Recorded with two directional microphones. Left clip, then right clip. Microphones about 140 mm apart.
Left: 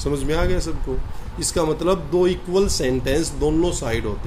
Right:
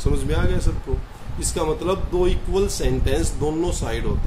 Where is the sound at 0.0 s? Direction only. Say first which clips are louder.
Left 3 dB; 40° left (ahead or behind).